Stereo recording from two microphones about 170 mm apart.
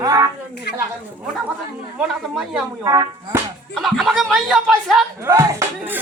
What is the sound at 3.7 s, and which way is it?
Speech, centre (ahead or behind).